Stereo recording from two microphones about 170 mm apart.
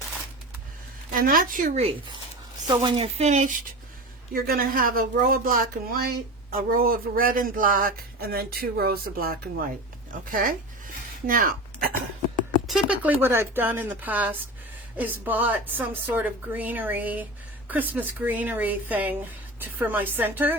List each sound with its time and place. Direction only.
1.1 s speech: 55° right (ahead or behind); by 2.0 s 40° right (ahead or behind)
2.6 s speech: 30° right (ahead or behind)
4.4 s speech: 60° right (ahead or behind)
12.6 s speech: 5° right (ahead or behind)